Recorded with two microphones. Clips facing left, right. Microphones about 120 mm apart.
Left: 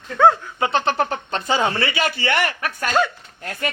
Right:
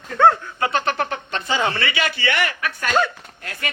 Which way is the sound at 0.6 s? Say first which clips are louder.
Left 2 dB; 25° left (ahead or behind).